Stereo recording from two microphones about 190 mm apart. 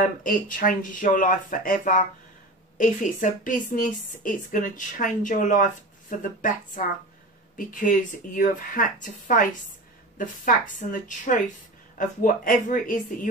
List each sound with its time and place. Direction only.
0.2 s a woman's voice: 45° left (ahead or behind)